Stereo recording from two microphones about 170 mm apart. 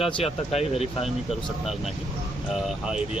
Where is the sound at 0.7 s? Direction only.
35° left (ahead or behind).